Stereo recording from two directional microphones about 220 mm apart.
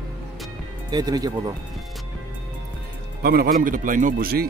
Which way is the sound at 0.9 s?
20° right (ahead or behind).